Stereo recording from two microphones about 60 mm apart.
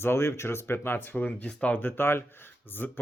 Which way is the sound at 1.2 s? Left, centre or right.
Left.